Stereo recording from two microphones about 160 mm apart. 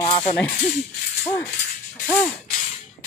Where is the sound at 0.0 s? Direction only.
35° left (ahead or behind).